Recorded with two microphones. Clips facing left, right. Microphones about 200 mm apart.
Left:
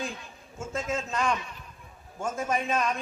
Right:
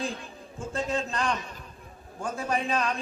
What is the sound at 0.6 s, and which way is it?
Speech, 35° right (ahead or behind).